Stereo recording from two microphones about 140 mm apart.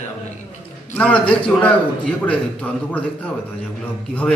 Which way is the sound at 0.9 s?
10° left (ahead or behind).